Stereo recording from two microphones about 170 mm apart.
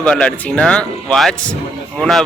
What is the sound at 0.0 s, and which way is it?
Speech, 5° left (ahead or behind).